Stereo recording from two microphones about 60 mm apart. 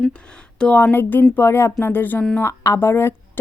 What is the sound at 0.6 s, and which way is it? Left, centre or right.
Speech, centre.